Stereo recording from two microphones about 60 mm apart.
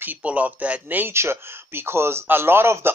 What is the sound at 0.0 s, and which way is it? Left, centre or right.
Speech, right.